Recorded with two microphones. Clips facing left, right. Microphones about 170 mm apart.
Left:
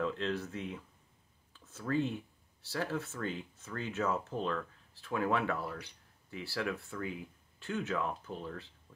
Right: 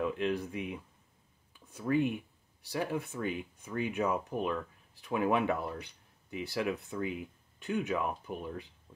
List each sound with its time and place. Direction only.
0.0 s speech: 15° right (ahead or behind)